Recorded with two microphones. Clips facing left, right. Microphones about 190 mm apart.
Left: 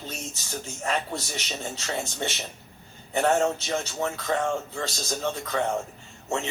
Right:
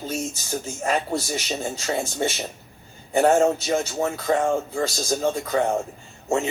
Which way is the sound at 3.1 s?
40° right (ahead or behind).